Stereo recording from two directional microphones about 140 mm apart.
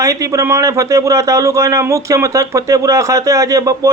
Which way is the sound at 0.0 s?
25° right (ahead or behind).